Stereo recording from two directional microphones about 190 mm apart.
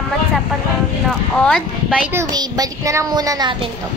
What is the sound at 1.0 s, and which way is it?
Speech, centre (ahead or behind).